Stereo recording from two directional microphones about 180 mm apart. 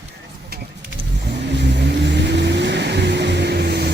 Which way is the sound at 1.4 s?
70° right (ahead or behind).